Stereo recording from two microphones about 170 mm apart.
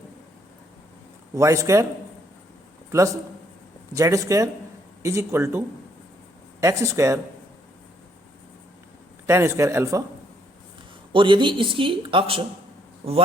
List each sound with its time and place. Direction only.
1.4 s speech: 20° right (ahead or behind)
3.9 s speech: 20° right (ahead or behind)
9.2 s speech: 15° right (ahead or behind)
11.1 s speech: 30° right (ahead or behind)